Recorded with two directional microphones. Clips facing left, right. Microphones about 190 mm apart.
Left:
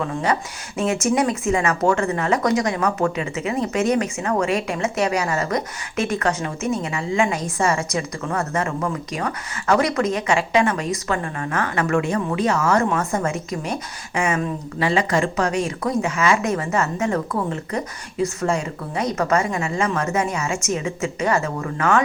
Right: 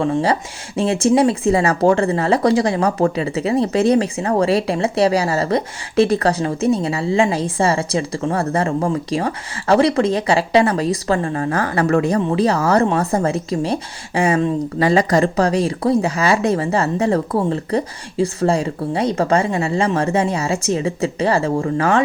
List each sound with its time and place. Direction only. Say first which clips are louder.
0.0 s speech: right 5 dB; 30° right (ahead or behind)